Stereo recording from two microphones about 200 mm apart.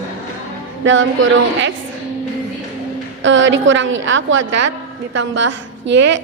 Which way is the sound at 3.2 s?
65° right (ahead or behind).